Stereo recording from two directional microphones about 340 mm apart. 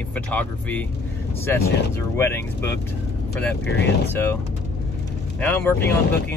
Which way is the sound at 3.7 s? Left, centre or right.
Left.